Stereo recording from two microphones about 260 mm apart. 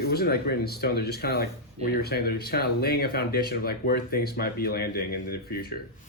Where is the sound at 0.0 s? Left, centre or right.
Left.